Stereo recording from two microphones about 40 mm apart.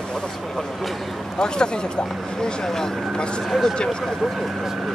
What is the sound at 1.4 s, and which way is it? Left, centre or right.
Speech, left.